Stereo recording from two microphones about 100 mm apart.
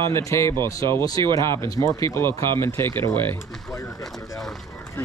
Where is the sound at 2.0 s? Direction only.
25° left (ahead or behind).